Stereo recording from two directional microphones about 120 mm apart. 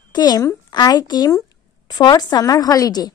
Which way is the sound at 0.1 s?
35° left (ahead or behind).